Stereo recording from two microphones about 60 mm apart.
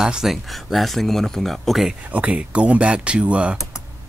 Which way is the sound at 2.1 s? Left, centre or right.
Right.